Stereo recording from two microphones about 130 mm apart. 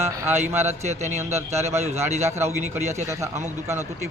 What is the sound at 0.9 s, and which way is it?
Speech, 60° right (ahead or behind).